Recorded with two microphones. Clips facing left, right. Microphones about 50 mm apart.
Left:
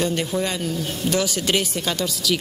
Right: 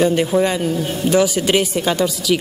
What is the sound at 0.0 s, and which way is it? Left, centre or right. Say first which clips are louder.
A woman's voice: right 8 dB; centre.